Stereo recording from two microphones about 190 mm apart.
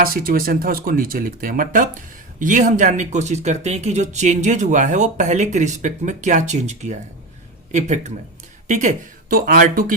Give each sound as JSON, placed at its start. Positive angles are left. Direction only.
{"t": 0.0, "sound": "speech", "side_deg": -50}